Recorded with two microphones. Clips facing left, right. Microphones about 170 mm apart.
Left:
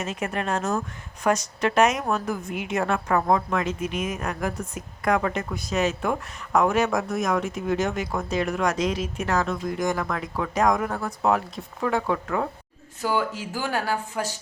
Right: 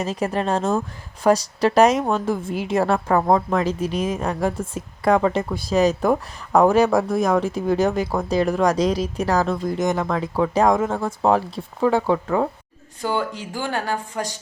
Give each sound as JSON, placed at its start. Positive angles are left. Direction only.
{"t": 0.0, "sound": "a woman's voice", "side_deg": -35}
{"t": 9.8, "sound": "speech", "side_deg": -25}
{"t": 13.0, "sound": "speech", "side_deg": 5}